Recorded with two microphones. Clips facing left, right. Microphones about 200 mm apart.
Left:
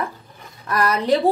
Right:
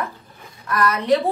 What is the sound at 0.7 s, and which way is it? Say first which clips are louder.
Speech: even; 35° left (ahead or behind).